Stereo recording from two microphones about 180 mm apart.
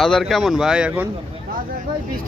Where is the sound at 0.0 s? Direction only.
Centre (ahead or behind).